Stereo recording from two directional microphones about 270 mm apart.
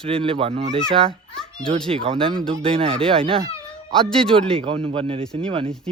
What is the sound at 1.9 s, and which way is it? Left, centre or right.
Speech, centre.